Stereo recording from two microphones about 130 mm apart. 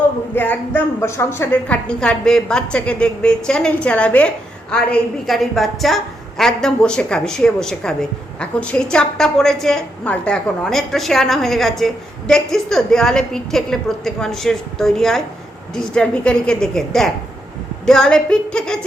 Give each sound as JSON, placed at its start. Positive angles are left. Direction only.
{"t": 0.3, "sound": "a woman's voice", "side_deg": 15}